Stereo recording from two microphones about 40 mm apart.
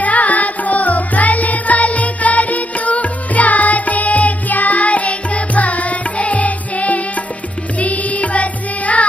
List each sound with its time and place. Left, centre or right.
0.0 s music: left